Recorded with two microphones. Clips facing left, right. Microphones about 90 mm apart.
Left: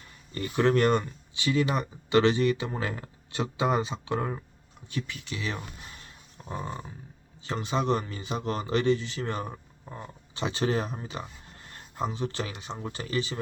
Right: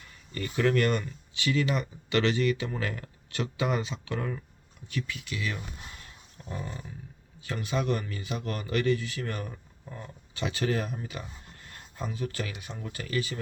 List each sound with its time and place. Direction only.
0.3 s speech: 25° left (ahead or behind)
6.4 s a sound: 35° left (ahead or behind)
7.4 s speech: 25° left (ahead or behind)